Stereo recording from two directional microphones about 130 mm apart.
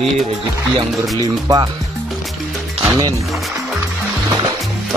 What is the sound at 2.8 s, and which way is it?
Music, 30° right (ahead or behind).